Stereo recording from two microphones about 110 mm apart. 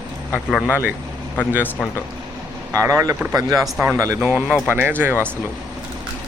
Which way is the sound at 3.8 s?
20° right (ahead or behind).